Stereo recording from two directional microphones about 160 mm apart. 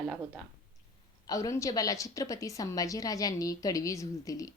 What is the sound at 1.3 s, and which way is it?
A woman's voice, 20° left (ahead or behind).